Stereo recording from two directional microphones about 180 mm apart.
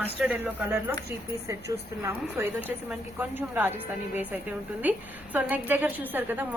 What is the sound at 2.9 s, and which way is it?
Speech, 10° right (ahead or behind).